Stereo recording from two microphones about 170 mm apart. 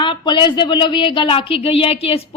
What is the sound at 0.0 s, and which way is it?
A woman's voice, 25° left (ahead or behind).